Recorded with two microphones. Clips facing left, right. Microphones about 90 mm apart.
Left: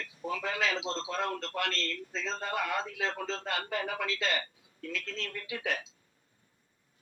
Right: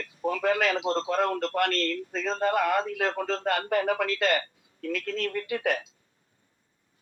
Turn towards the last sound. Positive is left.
turn(degrees=-55)  # may be behind; listen again after turning